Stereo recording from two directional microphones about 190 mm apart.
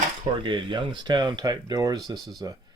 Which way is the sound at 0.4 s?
25° right (ahead or behind).